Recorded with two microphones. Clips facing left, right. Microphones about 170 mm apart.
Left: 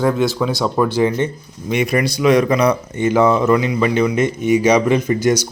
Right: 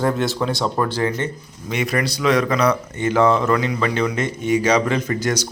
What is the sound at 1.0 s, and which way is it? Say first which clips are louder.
Speech: left 5 dB; 20° left (ahead or behind).